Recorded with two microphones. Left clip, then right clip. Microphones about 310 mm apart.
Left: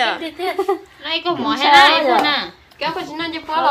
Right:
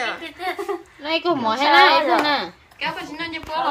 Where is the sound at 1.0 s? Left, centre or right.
Right.